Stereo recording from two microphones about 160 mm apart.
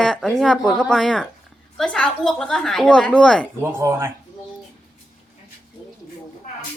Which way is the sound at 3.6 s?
15° right (ahead or behind).